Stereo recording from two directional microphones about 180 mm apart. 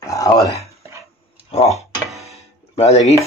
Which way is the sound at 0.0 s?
15° left (ahead or behind).